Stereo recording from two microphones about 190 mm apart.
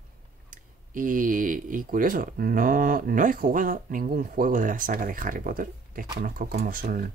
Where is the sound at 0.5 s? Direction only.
45° right (ahead or behind).